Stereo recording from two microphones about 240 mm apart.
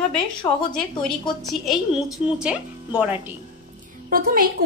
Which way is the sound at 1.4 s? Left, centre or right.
Centre.